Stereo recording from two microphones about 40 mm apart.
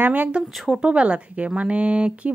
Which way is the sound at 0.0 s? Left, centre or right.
Right.